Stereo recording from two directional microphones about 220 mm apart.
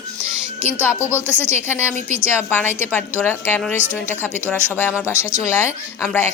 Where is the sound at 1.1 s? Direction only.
10° right (ahead or behind).